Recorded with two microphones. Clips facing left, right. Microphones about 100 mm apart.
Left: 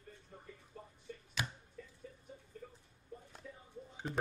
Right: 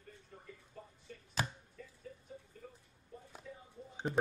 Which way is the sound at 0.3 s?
15° left (ahead or behind).